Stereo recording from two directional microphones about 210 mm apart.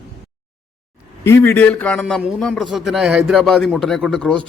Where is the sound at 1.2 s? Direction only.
10° left (ahead or behind).